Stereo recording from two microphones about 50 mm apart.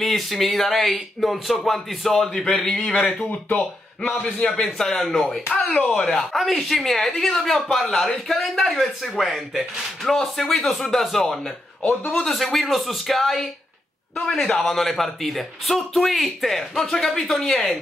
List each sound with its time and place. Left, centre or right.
0.0 s a man's voice: centre
2.1 s speech: centre
2.8 s a man's voice: centre
3.5 s speech: left
4.4 s a man's voice: centre
10.0 s a man's voice: centre